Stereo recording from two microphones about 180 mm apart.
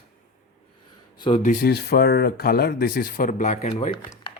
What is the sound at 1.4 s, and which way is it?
Speech, 50° left (ahead or behind).